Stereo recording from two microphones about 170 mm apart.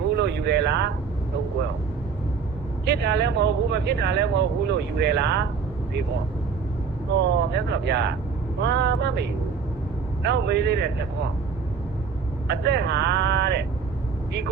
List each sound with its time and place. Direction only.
0.2 s a sound: 85° right
2.8 s speech: 90° right
7.2 s a man's voice: 85° right
12.5 s speech: 85° right